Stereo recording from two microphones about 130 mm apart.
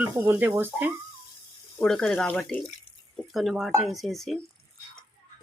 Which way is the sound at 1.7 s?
5° left (ahead or behind).